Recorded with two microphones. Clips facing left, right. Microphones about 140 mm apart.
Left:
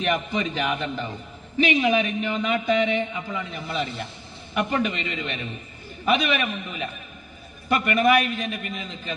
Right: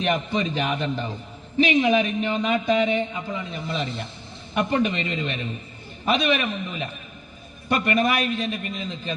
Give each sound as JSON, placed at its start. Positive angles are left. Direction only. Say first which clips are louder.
{"t": 0.0, "sound": "a man's voice", "louder": "right 1 dB", "side_deg": -35}